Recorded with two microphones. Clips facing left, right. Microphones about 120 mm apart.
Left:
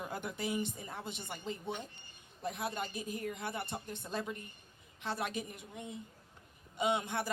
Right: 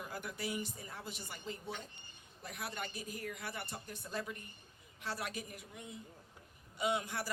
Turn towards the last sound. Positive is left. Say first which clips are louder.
# left 3 dB
turn(degrees=25)  # may be behind; listen again after turning